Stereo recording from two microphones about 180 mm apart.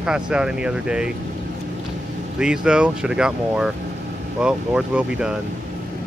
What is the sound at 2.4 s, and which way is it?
Speech, 5° right (ahead or behind).